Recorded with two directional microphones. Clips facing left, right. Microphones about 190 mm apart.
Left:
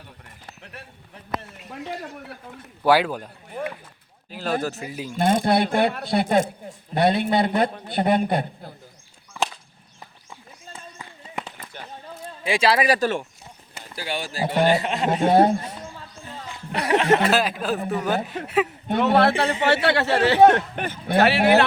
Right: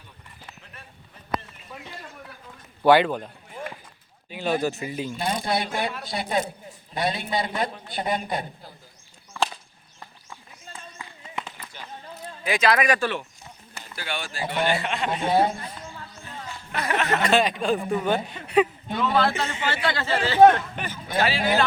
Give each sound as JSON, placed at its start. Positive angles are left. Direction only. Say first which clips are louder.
{"t": 0.6, "sound": "a sound", "louder": "left 5 dB", "side_deg": 75}
{"t": 2.8, "sound": "speech", "louder": "right 1 dB", "side_deg": 5}
{"t": 3.6, "sound": "a sound", "louder": "left 6 dB", "side_deg": 60}
{"t": 4.3, "sound": "speech", "louder": "right 1 dB", "side_deg": 0}
{"t": 5.1, "sound": "a man's voice", "louder": "left 9 dB", "side_deg": 50}
{"t": 11.3, "sound": "a sound", "louder": "left 2 dB", "side_deg": 50}
{"t": 12.2, "sound": "a man's voice", "louder": "left 2 dB", "side_deg": 30}
{"t": 16.9, "sound": "speech", "louder": "left 7 dB", "side_deg": 30}
{"t": 17.2, "sound": "speech", "louder": "even", "side_deg": 5}
{"t": 18.9, "sound": "a man's voice", "louder": "left 5 dB", "side_deg": 65}